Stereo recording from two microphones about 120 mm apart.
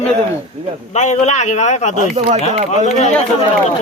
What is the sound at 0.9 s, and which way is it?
A man's voice, 75° left (ahead or behind).